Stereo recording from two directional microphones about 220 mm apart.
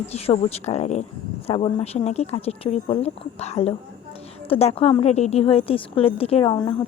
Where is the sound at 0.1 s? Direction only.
30° left (ahead or behind).